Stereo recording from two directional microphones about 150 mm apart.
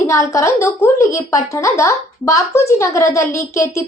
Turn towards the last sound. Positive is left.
turn(degrees=20)  # may be behind; listen again after turning